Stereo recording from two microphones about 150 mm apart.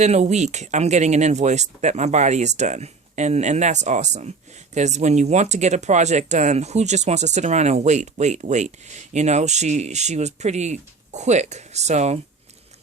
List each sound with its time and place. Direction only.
0.0 s speech: 50° right (ahead or behind)